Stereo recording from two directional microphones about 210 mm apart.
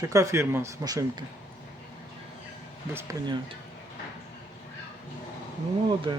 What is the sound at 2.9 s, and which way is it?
Speech, 15° right (ahead or behind).